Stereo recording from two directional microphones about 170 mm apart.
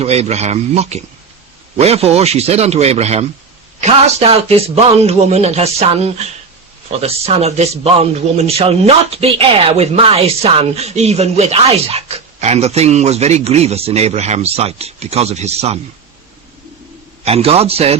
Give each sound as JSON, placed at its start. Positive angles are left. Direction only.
{"t": 0.0, "sound": "a man's voice", "side_deg": -40}
{"t": 17.2, "sound": "a man's voice", "side_deg": -35}